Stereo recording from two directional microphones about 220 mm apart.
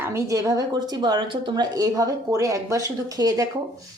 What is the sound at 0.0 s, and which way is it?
A woman's voice, 10° right (ahead or behind).